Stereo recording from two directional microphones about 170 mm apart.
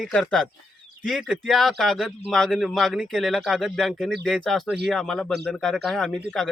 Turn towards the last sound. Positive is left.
turn(degrees=0)  # may be behind; listen again after turning